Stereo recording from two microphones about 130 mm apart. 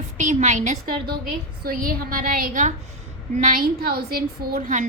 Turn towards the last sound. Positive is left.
turn(degrees=-90)